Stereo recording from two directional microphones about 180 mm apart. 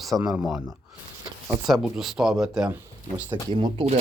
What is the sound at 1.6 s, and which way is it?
Speech, centre (ahead or behind).